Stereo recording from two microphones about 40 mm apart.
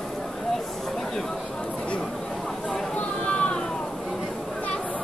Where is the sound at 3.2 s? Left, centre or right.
Left.